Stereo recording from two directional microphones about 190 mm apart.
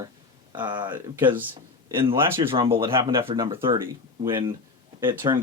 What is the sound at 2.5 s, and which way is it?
Speech, 25° right (ahead or behind).